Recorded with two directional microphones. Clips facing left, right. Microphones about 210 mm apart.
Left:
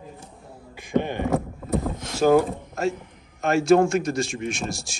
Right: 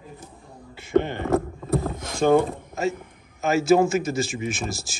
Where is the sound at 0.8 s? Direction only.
15° left (ahead or behind).